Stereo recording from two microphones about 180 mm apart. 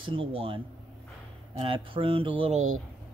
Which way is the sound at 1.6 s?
30° right (ahead or behind).